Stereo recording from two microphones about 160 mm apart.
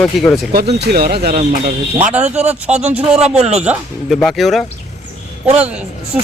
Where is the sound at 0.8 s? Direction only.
80° right.